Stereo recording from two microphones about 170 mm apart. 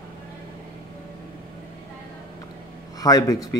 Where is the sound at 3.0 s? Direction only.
20° left (ahead or behind).